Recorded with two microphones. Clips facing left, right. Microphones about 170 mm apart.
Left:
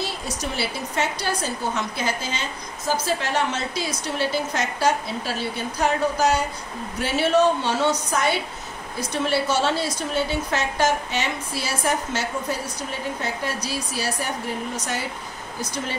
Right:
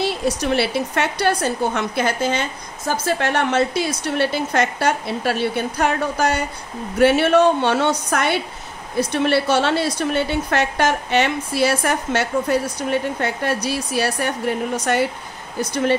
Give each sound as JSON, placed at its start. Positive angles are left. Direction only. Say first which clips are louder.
{"t": 0.0, "sound": "a woman's voice", "louder": "right 8 dB", "side_deg": -70}